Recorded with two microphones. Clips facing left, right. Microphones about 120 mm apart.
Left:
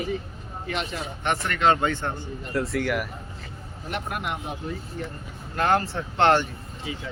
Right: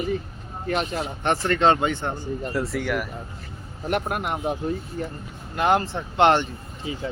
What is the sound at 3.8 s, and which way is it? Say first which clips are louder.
Speech: right 5 dB; 50° right (ahead or behind).